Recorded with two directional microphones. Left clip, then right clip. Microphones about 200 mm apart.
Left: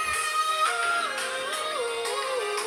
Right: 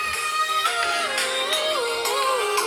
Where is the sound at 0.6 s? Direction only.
25° right (ahead or behind); by 2.6 s 45° right (ahead or behind).